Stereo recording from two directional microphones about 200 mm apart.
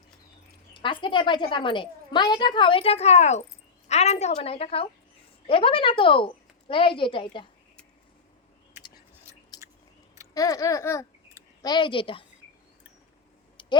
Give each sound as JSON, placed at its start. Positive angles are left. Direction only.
{"t": 0.7, "sound": "a woman's voice", "side_deg": 25}
{"t": 9.3, "sound": "chewing", "side_deg": -15}
{"t": 10.3, "sound": "a woman's voice", "side_deg": 15}
{"t": 13.6, "sound": "clicking", "side_deg": 25}